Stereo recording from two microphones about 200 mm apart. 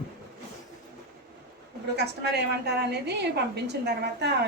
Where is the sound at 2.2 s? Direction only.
55° right (ahead or behind).